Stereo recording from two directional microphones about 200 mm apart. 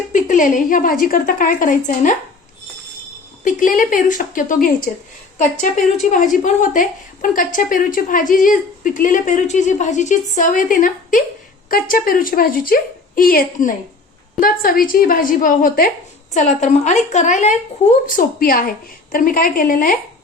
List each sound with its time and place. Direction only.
0.1 s a woman's voice: 40° left (ahead or behind)
3.4 s a woman's voice: 40° left (ahead or behind)